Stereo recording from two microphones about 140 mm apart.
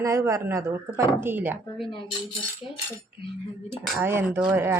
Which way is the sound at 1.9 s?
35° left (ahead or behind).